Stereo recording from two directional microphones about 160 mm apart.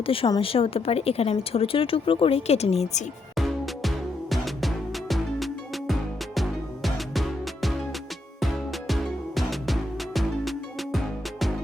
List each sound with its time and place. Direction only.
0.0 s a woman's voice: 35° left (ahead or behind)
3.3 s music: centre (ahead or behind)